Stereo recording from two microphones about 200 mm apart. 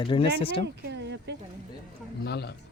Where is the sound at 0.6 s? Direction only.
60° right (ahead or behind).